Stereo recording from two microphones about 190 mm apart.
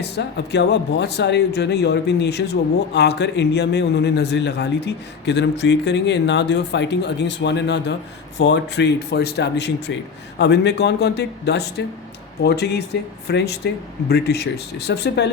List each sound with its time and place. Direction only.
0.0 s speech: 65° left (ahead or behind)